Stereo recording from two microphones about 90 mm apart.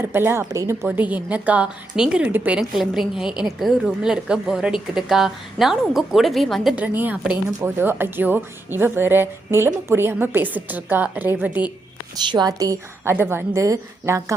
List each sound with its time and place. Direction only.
0.0 s a woman's voice: 25° right (ahead or behind)
0.9 s a woman's voice: 15° right (ahead or behind)
2.6 s a woman's voice: 5° right (ahead or behind)
6.7 s a woman's voice: 20° right (ahead or behind)
12.3 s a woman's voice: 50° right (ahead or behind)
13.1 s a woman's voice: 25° right (ahead or behind)